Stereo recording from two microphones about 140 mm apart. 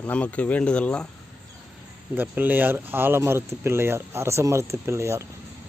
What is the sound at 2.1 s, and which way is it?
Speech, 15° right (ahead or behind).